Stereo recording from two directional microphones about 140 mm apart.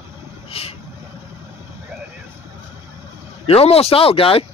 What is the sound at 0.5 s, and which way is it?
Vehicle, 45° left (ahead or behind).